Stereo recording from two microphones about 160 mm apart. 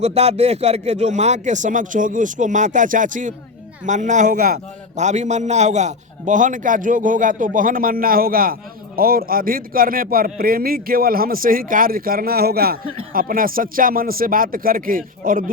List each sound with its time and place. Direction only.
0.0 s a man's voice: 40° right (ahead or behind); by 12.8 s 70° right (ahead or behind)
13.1 s a man's voice: 60° right (ahead or behind)